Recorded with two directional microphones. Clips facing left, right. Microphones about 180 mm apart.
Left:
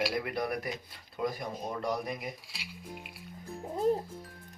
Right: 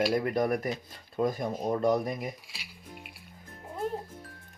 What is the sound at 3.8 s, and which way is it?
Music, 40° left (ahead or behind).